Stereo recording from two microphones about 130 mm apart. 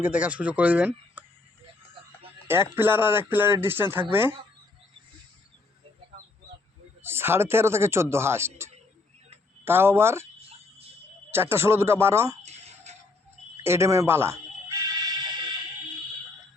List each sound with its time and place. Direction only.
0.0 s speech: 10° right (ahead or behind)
2.5 s speech: 15° right (ahead or behind)
7.0 s speech: 15° right (ahead or behind)
11.3 s speech: 20° right (ahead or behind)
12.4 s a sound: 60° right (ahead or behind)
13.7 s music: 20° right (ahead or behind)